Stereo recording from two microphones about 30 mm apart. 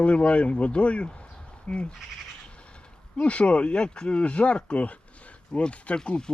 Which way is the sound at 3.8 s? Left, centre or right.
Left.